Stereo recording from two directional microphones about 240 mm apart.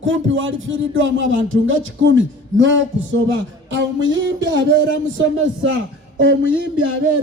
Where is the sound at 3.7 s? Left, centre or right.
Right.